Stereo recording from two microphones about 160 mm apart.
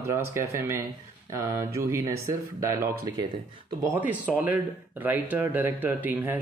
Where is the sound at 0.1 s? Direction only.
15° right (ahead or behind).